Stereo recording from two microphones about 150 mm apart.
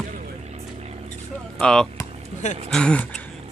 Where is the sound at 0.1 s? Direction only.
55° right (ahead or behind).